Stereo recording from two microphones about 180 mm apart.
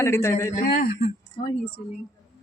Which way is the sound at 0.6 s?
55° left (ahead or behind).